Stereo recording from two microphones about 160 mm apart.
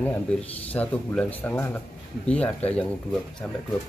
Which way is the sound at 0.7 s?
10° left (ahead or behind).